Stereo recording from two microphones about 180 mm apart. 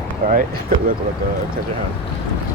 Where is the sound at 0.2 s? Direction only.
55° right (ahead or behind).